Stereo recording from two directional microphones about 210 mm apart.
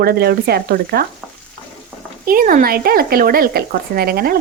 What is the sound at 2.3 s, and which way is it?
Speech, 45° right (ahead or behind).